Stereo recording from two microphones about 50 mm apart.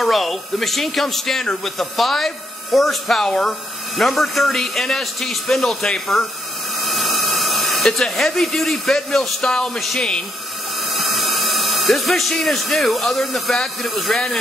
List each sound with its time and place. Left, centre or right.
0.0 s speech: centre
10.9 s speech: centre